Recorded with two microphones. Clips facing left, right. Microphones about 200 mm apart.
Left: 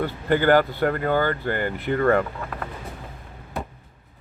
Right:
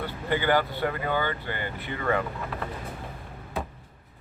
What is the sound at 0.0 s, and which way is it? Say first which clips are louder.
Speech: left 6 dB; 50° left (ahead or behind).